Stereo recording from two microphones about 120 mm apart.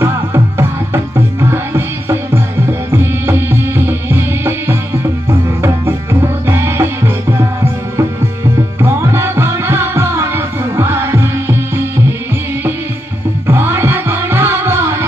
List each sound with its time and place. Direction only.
0.0 s music: 20° right (ahead or behind)
5.6 s tabla: 20° right (ahead or behind)
8.5 s music: 25° right (ahead or behind)
13.5 s music: 20° right (ahead or behind)